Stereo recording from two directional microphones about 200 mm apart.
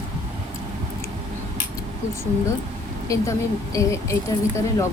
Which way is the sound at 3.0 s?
15° left (ahead or behind).